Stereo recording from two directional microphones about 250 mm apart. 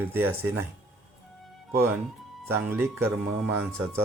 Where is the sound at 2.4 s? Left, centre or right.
Centre.